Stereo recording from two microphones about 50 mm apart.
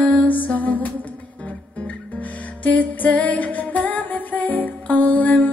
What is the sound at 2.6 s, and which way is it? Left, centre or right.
Music, left.